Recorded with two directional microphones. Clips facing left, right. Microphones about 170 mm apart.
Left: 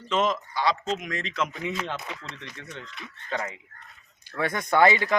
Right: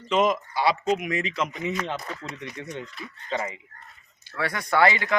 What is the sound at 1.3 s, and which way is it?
Speech, centre (ahead or behind).